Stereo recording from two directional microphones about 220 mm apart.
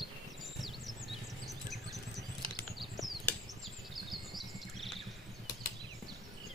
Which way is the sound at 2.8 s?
Centre (ahead or behind).